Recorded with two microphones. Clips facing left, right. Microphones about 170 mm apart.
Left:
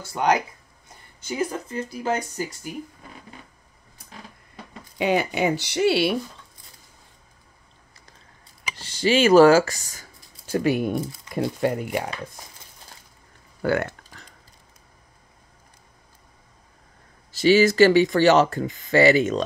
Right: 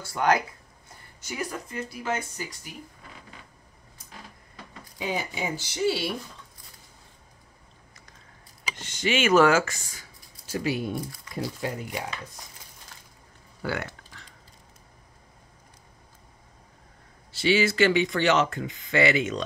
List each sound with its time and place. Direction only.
0.0 s speech: 20° left (ahead or behind); by 2.7 s 40° left (ahead or behind)
4.9 s speech: 70° left (ahead or behind)
8.7 s speech: 35° left (ahead or behind); by 12.0 s 60° left (ahead or behind)
13.6 s a sound: 50° left (ahead or behind)
17.3 s speech: 40° left (ahead or behind)